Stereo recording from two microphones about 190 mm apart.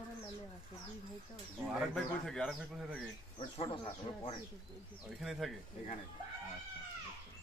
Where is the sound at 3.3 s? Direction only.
30° left (ahead or behind).